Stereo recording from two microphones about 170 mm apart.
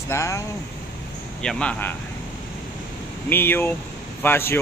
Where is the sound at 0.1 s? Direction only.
20° left (ahead or behind).